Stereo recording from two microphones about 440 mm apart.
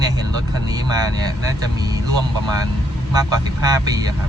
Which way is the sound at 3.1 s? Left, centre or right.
Centre.